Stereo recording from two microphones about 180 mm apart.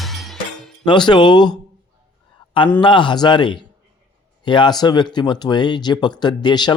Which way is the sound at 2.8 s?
25° left (ahead or behind).